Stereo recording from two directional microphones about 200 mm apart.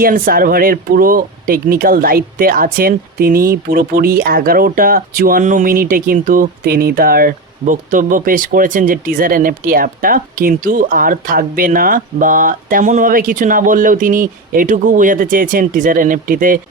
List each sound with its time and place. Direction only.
0.0 s speech: 45° right (ahead or behind)